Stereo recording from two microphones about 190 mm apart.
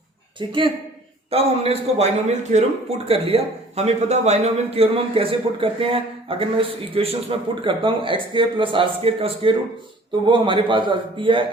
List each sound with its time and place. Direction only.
0.3 s a man's voice: 25° right (ahead or behind)